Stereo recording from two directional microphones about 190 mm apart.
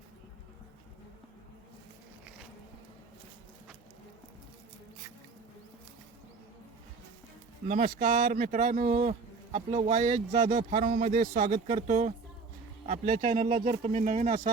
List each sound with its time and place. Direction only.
7.7 s speech: 40° right (ahead or behind)